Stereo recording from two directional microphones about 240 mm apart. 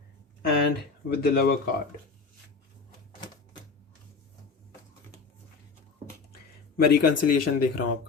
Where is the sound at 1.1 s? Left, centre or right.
Left.